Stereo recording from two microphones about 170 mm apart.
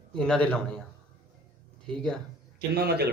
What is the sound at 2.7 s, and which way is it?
Speech, 70° right (ahead or behind).